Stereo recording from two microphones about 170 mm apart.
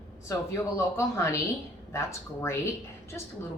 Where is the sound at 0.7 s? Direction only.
15° left (ahead or behind).